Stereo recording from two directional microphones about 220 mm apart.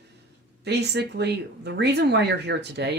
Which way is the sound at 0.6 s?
50° right (ahead or behind).